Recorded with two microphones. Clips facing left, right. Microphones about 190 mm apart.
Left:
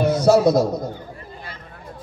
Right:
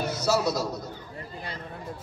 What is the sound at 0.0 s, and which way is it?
Speech, 55° left (ahead or behind).